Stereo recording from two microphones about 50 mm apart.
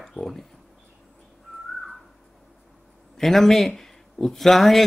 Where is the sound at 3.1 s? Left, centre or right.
Centre.